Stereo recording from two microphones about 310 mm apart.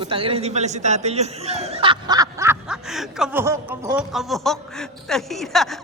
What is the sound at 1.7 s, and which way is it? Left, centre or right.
Snicker, centre.